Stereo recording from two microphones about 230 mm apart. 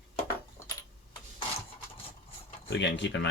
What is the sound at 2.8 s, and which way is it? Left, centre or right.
Speech, left.